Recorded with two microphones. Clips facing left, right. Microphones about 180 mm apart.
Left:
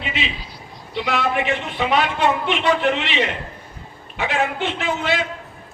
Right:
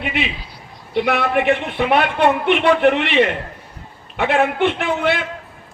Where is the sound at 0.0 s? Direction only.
60° right (ahead or behind).